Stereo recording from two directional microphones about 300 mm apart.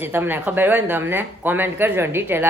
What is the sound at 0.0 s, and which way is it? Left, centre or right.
Speech, centre.